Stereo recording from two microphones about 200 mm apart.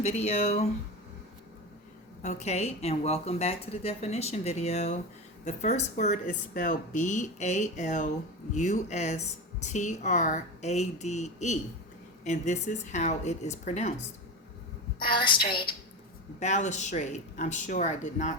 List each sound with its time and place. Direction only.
0.0 s speech: 35° left (ahead or behind)
2.2 s speech: 35° left (ahead or behind)
14.9 s a woman's voice: 25° left (ahead or behind)
16.4 s speech: 35° left (ahead or behind)